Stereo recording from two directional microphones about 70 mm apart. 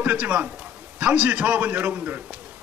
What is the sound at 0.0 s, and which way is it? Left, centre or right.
A man's voice, right.